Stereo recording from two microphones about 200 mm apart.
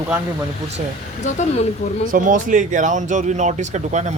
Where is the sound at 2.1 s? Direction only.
40° right (ahead or behind).